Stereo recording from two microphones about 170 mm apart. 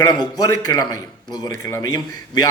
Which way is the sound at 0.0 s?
25° left (ahead or behind).